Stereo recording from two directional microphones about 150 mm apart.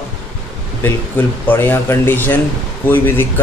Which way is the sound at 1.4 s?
15° left (ahead or behind).